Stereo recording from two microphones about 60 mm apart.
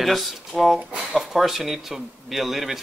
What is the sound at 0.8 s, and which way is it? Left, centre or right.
Speech, centre.